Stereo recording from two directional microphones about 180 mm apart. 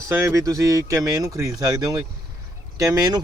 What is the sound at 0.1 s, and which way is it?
Speech, 15° right (ahead or behind).